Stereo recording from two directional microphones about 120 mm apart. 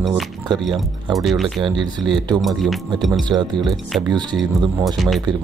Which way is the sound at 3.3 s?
40° right (ahead or behind).